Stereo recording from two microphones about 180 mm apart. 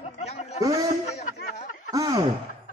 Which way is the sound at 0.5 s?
20° right (ahead or behind).